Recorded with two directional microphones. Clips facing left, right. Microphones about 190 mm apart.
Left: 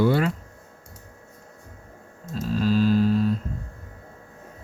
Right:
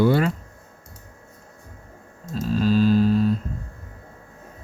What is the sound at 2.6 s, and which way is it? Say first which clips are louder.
Music: right 2 dB; 30° right (ahead or behind).